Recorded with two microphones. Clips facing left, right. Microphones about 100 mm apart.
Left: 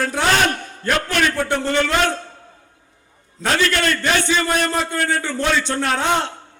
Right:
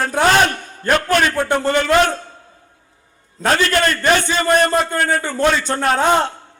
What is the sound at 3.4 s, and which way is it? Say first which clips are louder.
A man's voice: right 3 dB; 45° right (ahead or behind).